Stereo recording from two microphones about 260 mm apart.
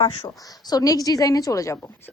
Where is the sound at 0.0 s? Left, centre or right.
Centre.